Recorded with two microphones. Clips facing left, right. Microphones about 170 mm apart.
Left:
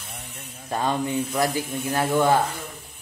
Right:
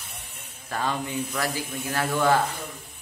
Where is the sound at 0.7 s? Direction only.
20° left (ahead or behind).